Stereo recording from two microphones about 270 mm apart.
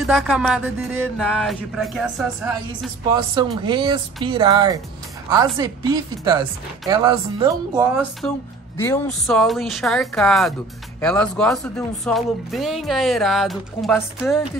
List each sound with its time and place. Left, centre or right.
0.0 s a sound: centre
0.9 s speech: centre
3.1 s speech: centre